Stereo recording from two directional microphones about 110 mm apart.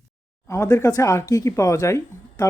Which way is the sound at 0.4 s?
25° left (ahead or behind).